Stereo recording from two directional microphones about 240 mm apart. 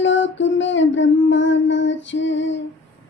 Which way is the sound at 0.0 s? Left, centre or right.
Left.